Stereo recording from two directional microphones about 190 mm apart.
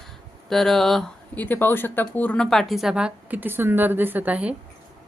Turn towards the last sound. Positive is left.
turn(degrees=-10)  # may be behind; listen again after turning